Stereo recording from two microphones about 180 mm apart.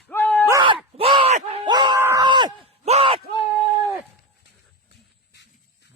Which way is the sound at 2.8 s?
35° right (ahead or behind).